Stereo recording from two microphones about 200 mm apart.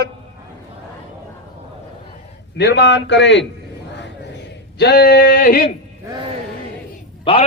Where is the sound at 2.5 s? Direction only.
60° left (ahead or behind).